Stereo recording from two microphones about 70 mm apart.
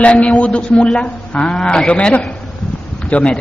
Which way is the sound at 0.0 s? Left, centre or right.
Centre.